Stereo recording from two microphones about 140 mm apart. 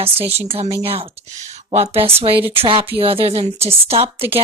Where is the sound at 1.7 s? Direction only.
45° right (ahead or behind).